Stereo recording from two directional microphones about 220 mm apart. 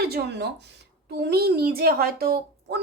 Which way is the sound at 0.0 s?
45° right (ahead or behind).